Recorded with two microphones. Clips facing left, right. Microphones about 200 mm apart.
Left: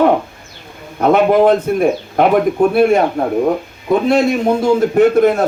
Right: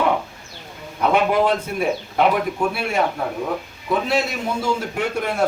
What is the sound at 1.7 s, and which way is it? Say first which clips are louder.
A man's voice: left 8 dB; 45° left (ahead or behind).